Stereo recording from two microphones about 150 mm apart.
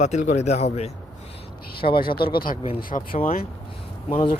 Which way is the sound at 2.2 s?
80° left.